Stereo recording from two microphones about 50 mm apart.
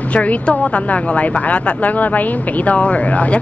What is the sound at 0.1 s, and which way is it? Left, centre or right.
Speech, left.